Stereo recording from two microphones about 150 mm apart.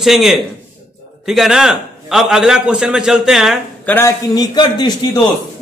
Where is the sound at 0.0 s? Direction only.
Centre (ahead or behind).